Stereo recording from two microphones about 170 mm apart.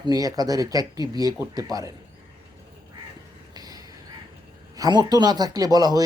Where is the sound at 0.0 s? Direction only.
20° right (ahead or behind).